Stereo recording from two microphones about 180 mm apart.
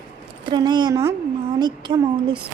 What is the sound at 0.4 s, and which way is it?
A woman's voice, 25° right (ahead or behind).